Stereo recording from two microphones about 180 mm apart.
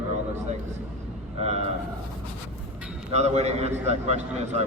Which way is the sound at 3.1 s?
35° right (ahead or behind).